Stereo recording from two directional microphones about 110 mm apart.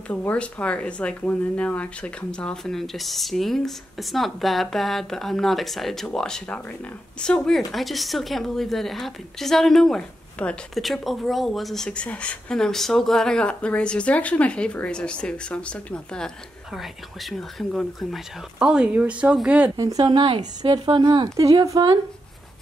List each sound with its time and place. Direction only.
0.1 s speech: 10° left (ahead or behind)
16.7 s speech: centre (ahead or behind)
18.6 s speech: 10° right (ahead or behind)
19.8 s a woman's voice: 35° right (ahead or behind)
21.4 s a woman's voice: 30° right (ahead or behind)